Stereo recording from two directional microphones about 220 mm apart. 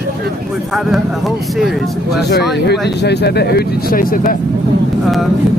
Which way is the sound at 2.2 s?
50° left (ahead or behind).